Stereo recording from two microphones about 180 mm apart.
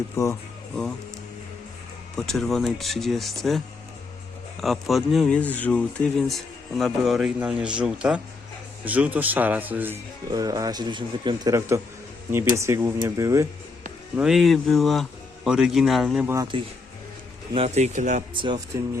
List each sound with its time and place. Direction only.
0.2 s speech: 15° left (ahead or behind)
2.1 s speech: centre (ahead or behind)
4.6 s speech: centre (ahead or behind); by 13.5 s 15° right (ahead or behind)
14.2 s speech: centre (ahead or behind)
16.2 s speech: 15° right (ahead or behind)
17.5 s speech: 35° right (ahead or behind)
18.3 s speech: 25° right (ahead or behind)